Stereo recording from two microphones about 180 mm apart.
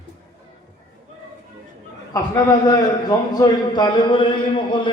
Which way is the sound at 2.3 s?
20° left (ahead or behind).